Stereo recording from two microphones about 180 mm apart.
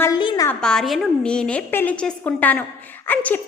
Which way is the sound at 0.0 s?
25° left (ahead or behind).